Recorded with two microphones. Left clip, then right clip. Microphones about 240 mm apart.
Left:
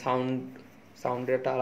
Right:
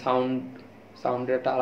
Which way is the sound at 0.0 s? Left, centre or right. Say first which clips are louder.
Right 4 dB; left.